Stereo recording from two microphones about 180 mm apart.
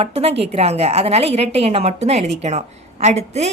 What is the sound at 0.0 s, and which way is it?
Speech, 35° right (ahead or behind).